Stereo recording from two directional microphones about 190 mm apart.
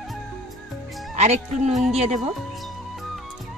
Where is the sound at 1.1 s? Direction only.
35° right (ahead or behind).